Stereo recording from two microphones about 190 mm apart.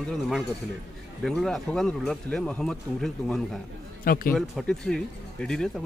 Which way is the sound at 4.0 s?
50° left (ahead or behind).